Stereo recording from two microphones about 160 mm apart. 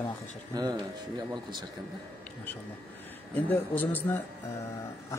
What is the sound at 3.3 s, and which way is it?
Speech, 10° left (ahead or behind).